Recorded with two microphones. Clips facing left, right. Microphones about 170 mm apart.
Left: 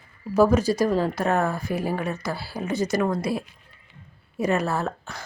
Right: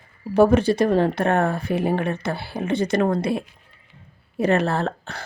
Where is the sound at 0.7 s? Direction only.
25° right (ahead or behind).